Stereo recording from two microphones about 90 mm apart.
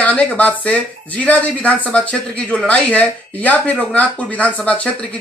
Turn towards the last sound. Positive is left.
turn(degrees=15)  # may be behind; listen again after turning